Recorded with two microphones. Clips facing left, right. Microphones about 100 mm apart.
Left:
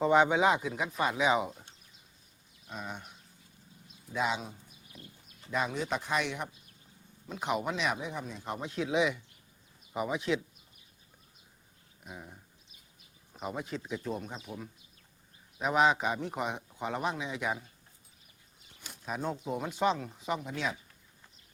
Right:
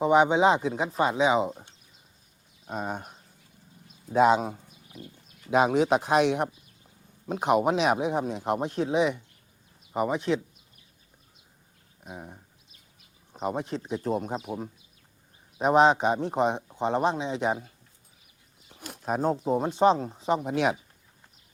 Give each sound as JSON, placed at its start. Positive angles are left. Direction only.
{"t": 0.0, "sound": "speech", "side_deg": -15}
{"t": 2.6, "sound": "speech", "side_deg": -45}
{"t": 5.5, "sound": "speech", "side_deg": -70}
{"t": 7.3, "sound": "speech", "side_deg": -50}
{"t": 8.9, "sound": "speech", "side_deg": -30}
{"t": 9.9, "sound": "speech", "side_deg": -45}
{"t": 12.0, "sound": "speech", "side_deg": -35}
{"t": 14.2, "sound": "speech", "side_deg": -50}
{"t": 15.5, "sound": "speech", "side_deg": -30}
{"t": 18.7, "sound": "a sound", "side_deg": -65}
{"t": 19.0, "sound": "speech", "side_deg": -40}